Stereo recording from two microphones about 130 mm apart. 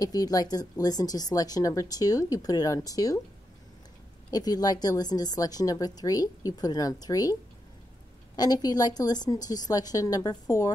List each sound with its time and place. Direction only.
0.0 s speech: 30° left (ahead or behind)
4.3 s speech: 30° left (ahead or behind)
8.4 s speech: 30° left (ahead or behind)